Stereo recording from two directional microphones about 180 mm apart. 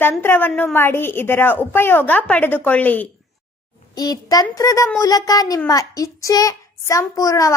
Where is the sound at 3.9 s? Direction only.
20° left (ahead or behind).